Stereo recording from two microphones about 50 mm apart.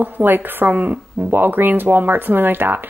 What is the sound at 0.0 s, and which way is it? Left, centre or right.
Speech, right.